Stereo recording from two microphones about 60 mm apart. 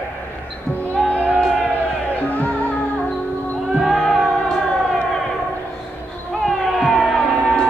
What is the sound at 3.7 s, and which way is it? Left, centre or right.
Music, centre.